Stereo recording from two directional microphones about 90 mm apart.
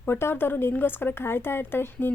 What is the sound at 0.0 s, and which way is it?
A woman's voice, 25° left (ahead or behind).